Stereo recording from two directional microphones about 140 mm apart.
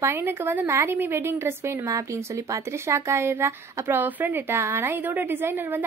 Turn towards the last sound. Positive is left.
turn(degrees=-15)  # may be behind; listen again after turning